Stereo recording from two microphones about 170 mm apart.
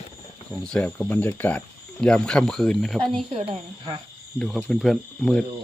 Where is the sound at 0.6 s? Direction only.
5° left (ahead or behind).